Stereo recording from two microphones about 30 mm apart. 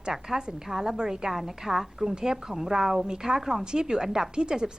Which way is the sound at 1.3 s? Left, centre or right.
Centre.